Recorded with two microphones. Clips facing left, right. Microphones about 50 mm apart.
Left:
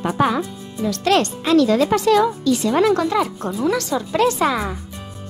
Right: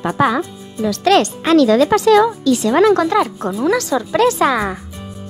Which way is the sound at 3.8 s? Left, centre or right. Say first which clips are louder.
Right 4 dB; right.